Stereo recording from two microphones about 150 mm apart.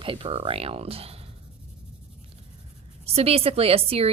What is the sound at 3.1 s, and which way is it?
A woman's voice, 40° right (ahead or behind).